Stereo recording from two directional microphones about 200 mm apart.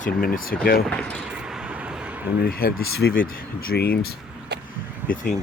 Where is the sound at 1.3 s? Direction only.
5° right (ahead or behind).